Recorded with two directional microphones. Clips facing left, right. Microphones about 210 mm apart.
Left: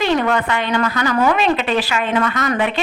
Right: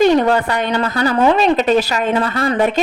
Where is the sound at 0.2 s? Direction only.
35° right (ahead or behind).